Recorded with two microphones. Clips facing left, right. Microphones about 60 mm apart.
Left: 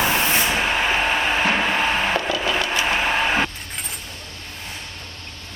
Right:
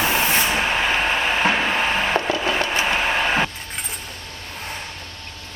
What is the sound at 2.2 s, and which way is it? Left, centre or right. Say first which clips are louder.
Wood: right 1 dB; right.